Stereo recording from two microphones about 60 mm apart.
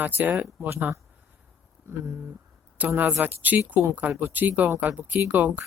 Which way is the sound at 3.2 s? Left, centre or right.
Right.